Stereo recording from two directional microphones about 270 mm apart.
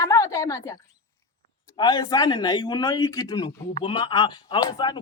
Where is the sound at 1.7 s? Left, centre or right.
Centre.